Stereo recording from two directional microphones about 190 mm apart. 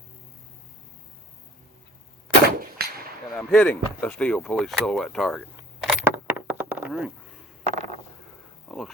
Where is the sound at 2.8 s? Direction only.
55° right (ahead or behind).